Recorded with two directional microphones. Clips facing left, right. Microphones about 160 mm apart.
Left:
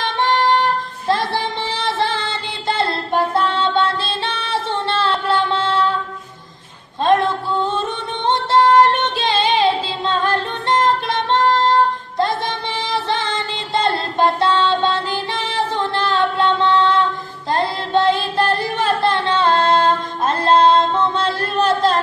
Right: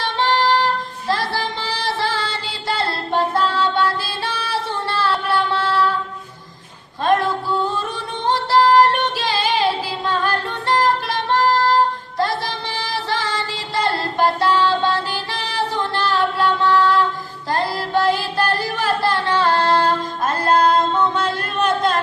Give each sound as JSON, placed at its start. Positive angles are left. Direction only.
{"t": 0.0, "sound": "music", "side_deg": 20}
{"t": 7.1, "sound": "female singing", "side_deg": 20}
{"t": 8.3, "sound": "music", "side_deg": 20}